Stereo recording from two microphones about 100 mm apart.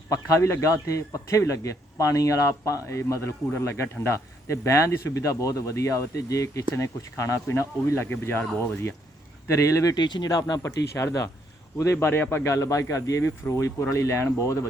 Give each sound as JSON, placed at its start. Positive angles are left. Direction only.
{"t": 0.1, "sound": "speech", "side_deg": 30}
{"t": 9.9, "sound": "speech", "side_deg": 45}